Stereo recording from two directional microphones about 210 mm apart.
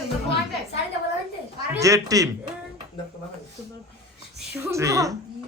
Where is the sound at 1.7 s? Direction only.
15° right (ahead or behind).